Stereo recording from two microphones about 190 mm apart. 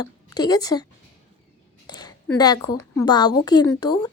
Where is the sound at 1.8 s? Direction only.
20° left (ahead or behind).